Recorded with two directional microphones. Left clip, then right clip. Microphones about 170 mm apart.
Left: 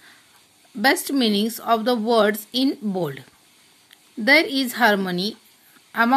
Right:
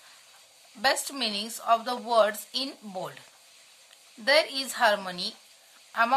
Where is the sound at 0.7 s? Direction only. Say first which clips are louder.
Left 7 dB; 30° left (ahead or behind).